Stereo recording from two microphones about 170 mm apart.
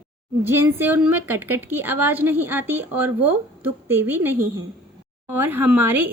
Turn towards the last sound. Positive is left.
turn(degrees=-10)  # may be behind; listen again after turning